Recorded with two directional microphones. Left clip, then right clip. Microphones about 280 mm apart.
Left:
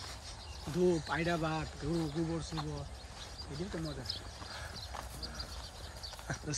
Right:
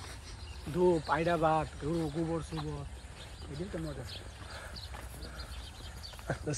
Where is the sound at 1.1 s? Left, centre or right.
Centre.